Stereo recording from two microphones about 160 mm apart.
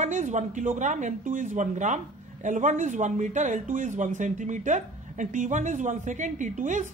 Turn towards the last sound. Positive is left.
turn(degrees=-50)  # may be behind; listen again after turning